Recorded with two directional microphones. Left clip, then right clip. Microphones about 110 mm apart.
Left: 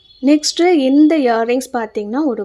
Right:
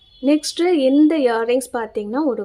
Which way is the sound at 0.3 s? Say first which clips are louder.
Left 5 dB; 30° left (ahead or behind).